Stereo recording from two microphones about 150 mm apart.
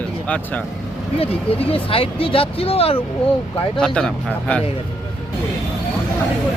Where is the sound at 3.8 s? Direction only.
5° left (ahead or behind).